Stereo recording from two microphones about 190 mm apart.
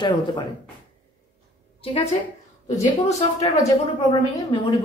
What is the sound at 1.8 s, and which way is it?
Speech, 30° left (ahead or behind).